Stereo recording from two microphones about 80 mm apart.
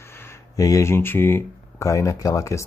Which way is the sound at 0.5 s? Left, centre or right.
Left.